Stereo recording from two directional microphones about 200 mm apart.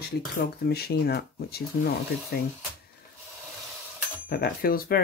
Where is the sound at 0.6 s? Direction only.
50° left (ahead or behind).